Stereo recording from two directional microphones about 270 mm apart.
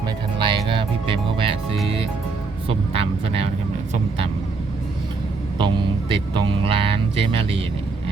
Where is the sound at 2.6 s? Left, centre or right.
Right.